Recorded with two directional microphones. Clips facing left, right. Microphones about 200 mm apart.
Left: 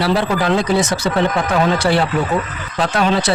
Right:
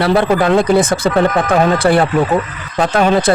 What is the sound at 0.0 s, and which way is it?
A man's voice, 55° right (ahead or behind).